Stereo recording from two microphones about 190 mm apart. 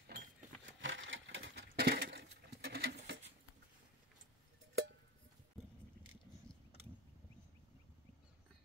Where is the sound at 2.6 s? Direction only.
55° right (ahead or behind).